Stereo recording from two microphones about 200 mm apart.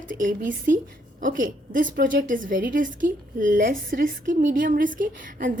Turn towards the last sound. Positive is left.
turn(degrees=-40)  # may be behind; listen again after turning